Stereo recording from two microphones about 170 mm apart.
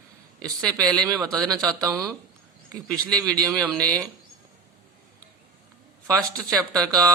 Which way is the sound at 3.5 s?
5° left (ahead or behind).